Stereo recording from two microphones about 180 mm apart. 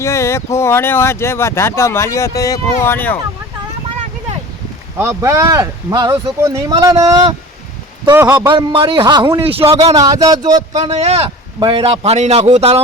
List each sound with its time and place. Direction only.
0.0 s speech: 15° left (ahead or behind)
4.9 s a man's voice: 15° right (ahead or behind)
8.4 s speech: 25° right (ahead or behind)
10.8 s a man's voice: 35° right (ahead or behind)